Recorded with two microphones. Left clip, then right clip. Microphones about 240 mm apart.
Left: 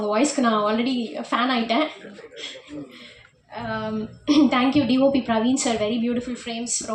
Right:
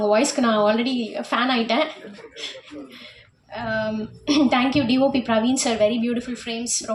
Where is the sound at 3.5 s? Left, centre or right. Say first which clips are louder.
Right 3 dB; right.